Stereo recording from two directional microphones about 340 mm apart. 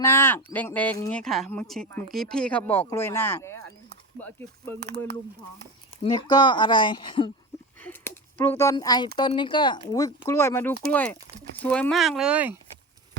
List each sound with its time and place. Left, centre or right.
0.0 s speech: centre
4.8 s speech: right
6.0 s speech: centre